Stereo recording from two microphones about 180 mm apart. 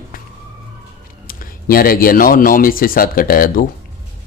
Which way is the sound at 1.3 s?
55° left (ahead or behind).